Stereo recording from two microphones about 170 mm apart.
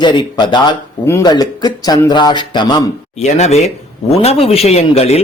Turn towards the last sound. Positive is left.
turn(degrees=40)  # may be behind; listen again after turning